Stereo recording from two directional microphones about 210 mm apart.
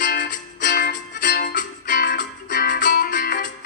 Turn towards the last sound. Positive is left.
turn(degrees=40)  # may be behind; listen again after turning